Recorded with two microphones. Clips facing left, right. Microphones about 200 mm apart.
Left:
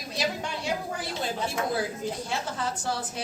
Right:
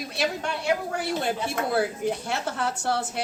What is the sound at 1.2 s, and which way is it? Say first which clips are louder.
A woman's voice: right 2 dB; 65° right (ahead or behind).